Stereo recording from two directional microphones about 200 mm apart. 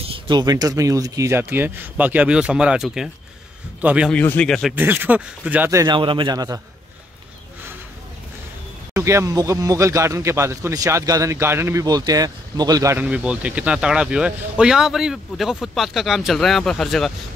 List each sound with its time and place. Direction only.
0.0 s a man's voice: 25° right (ahead or behind); by 4.1 s 5° right (ahead or behind)
4.1 s a man's voice: 10° left (ahead or behind); by 6.6 s 20° right (ahead or behind)
8.9 s a man's voice: 15° right (ahead or behind); by 17.1 s centre (ahead or behind)